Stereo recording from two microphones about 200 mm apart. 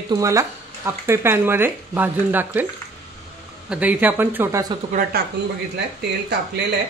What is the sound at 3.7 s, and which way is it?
Speech, 5° right (ahead or behind).